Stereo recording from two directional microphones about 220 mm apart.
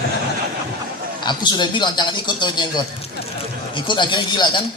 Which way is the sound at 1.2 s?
20° left (ahead or behind).